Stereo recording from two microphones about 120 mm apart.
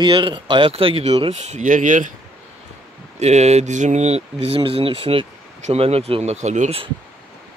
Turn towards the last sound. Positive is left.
turn(degrees=-75)  # may be behind; listen again after turning